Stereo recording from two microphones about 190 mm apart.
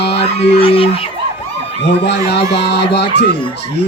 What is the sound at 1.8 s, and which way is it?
Music, 60° left (ahead or behind).